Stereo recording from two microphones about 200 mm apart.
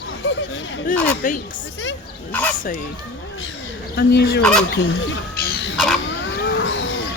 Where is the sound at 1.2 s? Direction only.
40° left (ahead or behind).